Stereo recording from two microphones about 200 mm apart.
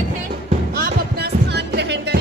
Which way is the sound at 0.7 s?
50° right (ahead or behind).